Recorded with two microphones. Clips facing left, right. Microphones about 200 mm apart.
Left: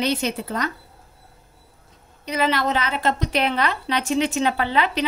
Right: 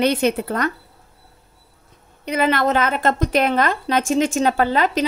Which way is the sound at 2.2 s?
55° right (ahead or behind).